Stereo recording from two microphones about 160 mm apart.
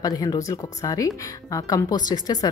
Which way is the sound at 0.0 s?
25° left (ahead or behind).